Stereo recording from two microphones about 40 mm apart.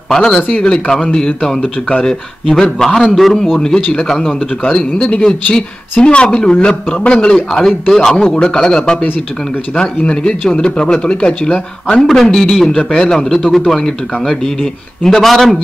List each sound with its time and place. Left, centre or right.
0.1 s a man's voice: centre
2.8 s a man's voice: centre
3.5 s a man's voice: centre
6.2 s a man's voice: centre
6.5 s a man's voice: left; by 9.0 s centre
10.0 s speech: left
11.9 s a man's voice: centre